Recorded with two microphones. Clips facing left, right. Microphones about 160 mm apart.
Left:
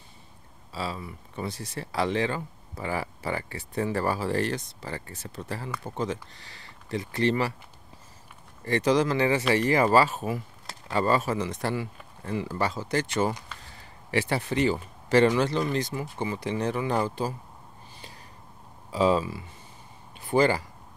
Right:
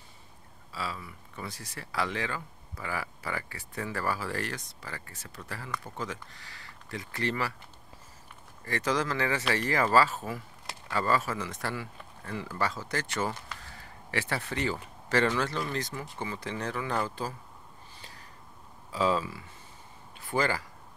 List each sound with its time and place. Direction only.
0.7 s speech: 25° left (ahead or behind)
8.6 s speech: 20° left (ahead or behind)
18.9 s speech: 20° left (ahead or behind)